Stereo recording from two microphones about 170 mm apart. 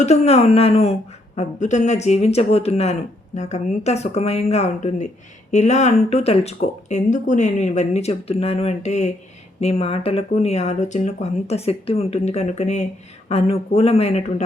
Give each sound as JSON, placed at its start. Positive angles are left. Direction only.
{"t": 0.0, "sound": "speech", "side_deg": 40}